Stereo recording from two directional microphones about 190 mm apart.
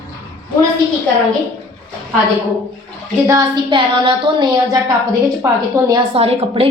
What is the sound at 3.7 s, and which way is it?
A woman's voice, 25° right (ahead or behind).